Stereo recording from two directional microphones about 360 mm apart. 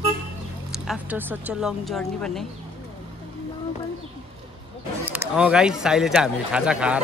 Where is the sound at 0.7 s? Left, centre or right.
Centre.